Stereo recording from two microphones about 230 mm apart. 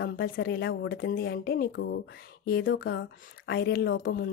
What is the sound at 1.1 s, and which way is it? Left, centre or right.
Speech, left.